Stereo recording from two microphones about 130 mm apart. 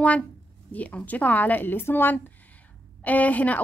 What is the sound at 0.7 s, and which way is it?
A woman's voice, 10° left (ahead or behind).